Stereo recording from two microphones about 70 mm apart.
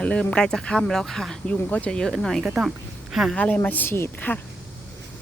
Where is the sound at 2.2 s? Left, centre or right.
Centre.